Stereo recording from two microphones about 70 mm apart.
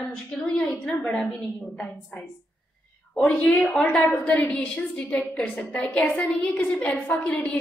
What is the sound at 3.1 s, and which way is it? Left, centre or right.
Speech, centre.